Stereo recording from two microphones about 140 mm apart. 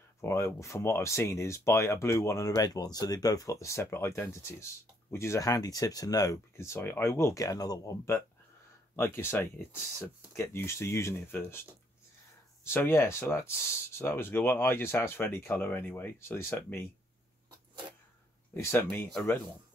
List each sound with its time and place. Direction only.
0.2 s speech: 20° left (ahead or behind)
12.6 s speech: 15° left (ahead or behind)
18.5 s speech: 15° left (ahead or behind)